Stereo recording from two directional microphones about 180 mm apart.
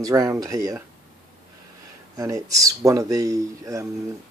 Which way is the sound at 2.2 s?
20° right (ahead or behind).